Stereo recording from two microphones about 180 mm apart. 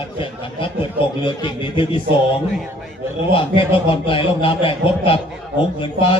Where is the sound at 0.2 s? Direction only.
30° left (ahead or behind).